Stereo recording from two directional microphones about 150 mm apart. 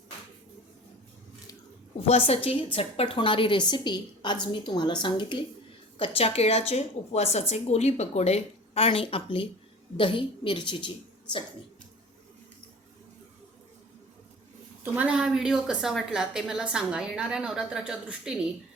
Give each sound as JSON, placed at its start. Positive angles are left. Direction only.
{"t": 2.0, "sound": "a woman's voice", "side_deg": 40}
{"t": 14.9, "sound": "a woman's voice", "side_deg": -10}